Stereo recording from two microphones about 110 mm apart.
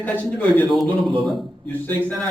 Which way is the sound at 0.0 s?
15° left (ahead or behind).